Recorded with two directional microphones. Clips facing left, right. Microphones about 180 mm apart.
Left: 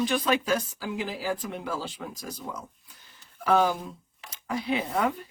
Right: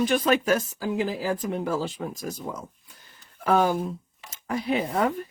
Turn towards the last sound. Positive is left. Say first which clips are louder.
# right 3 dB
turn(degrees=-45)  # may be behind; listen again after turning